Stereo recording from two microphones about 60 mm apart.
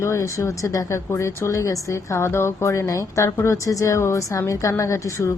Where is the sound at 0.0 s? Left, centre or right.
Left.